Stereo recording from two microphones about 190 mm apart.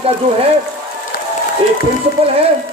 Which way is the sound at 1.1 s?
55° left (ahead or behind).